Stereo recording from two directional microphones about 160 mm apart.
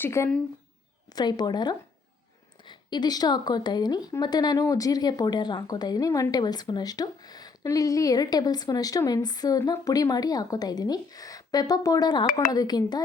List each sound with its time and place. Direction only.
0.0 s speech: 15° left (ahead or behind)
12.2 s speech: 55° left (ahead or behind)
12.5 s speech: 25° left (ahead or behind)